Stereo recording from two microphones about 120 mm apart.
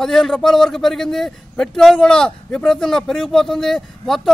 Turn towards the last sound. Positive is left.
turn(degrees=0)  # may be behind; listen again after turning